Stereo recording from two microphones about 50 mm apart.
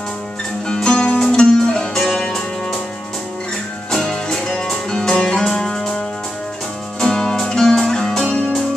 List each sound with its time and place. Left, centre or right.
0.7 s music: centre
2.0 s music: centre
3.9 s music: centre